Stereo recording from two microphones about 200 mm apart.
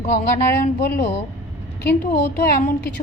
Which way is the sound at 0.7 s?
50° left (ahead or behind).